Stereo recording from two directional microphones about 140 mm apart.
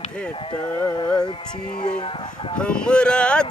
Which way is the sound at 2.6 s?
5° left (ahead or behind).